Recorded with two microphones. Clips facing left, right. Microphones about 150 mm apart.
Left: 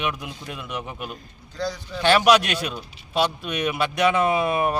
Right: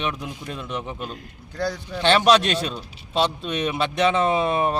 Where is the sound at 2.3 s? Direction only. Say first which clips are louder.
Even; 30° right (ahead or behind).